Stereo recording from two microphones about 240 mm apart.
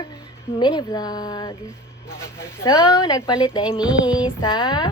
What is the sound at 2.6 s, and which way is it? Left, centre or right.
Speech, centre.